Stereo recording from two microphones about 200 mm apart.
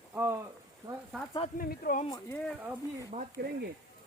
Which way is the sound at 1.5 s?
45° left (ahead or behind).